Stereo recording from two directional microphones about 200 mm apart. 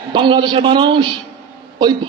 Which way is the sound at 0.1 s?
25° right (ahead or behind).